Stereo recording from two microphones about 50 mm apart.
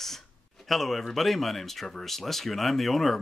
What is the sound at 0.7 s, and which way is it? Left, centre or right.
Speech, centre.